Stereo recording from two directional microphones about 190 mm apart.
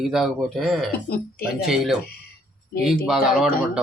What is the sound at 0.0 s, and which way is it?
Speech, centre (ahead or behind).